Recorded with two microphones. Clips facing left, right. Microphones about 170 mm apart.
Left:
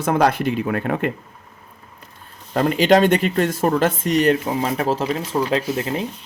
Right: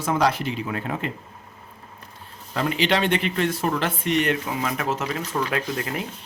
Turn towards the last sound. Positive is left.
turn(degrees=25)  # may be behind; listen again after turning